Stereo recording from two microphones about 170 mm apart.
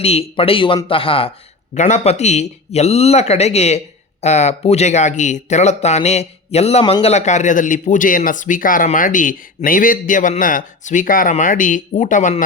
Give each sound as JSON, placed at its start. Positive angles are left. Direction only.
{"t": 0.0, "sound": "speech", "side_deg": 35}
{"t": 1.7, "sound": "speech", "side_deg": 45}